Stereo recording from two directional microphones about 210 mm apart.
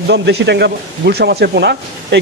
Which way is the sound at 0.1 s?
55° right (ahead or behind).